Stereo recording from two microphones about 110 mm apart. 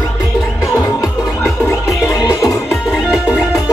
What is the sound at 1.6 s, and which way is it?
Music, 30° left (ahead or behind).